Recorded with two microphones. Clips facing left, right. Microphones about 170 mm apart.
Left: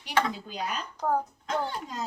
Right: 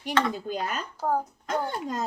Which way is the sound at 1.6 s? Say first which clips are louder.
Right 4 dB; 50° right (ahead or behind).